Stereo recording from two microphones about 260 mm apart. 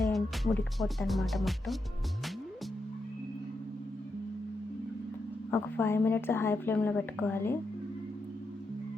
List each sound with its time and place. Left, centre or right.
0.0 s speech: centre
5.5 s a woman's voice: centre